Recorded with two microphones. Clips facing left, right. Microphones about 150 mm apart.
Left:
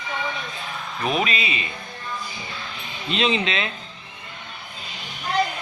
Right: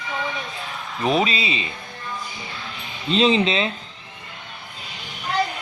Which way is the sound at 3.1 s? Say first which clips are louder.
Right 5 dB; 35° right (ahead or behind).